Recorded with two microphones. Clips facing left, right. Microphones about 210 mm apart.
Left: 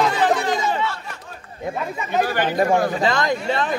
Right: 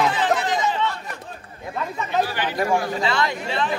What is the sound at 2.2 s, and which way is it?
Speech, 50° left (ahead or behind).